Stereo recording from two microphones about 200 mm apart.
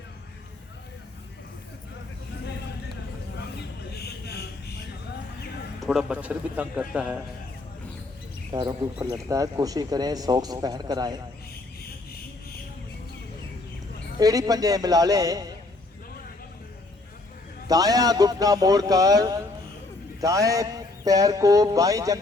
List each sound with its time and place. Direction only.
3.9 s vehicle: 55° left (ahead or behind)
5.8 s a man's voice: centre (ahead or behind)
8.5 s a man's voice: 20° right (ahead or behind)
14.2 s a man's voice: 20° right (ahead or behind)
17.7 s a man's voice: 20° right (ahead or behind)